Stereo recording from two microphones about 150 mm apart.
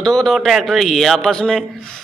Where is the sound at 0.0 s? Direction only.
Centre (ahead or behind).